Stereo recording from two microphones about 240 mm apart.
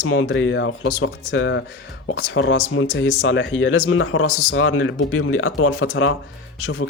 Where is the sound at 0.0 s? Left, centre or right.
Left.